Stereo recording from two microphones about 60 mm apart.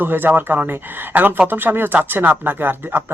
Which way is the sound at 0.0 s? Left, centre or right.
Right.